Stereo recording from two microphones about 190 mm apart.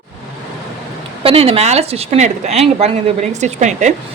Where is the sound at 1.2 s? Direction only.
30° right (ahead or behind).